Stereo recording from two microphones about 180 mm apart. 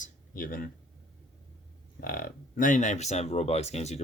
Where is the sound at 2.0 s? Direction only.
55° left (ahead or behind).